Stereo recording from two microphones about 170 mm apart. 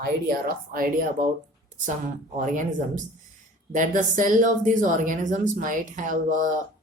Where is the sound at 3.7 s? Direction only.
50° right (ahead or behind).